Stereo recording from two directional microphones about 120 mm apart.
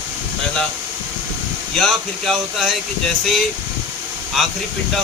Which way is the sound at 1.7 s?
Centre (ahead or behind).